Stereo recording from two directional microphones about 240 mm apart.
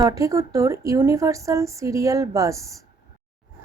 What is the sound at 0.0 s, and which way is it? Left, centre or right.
A woman's voice, centre.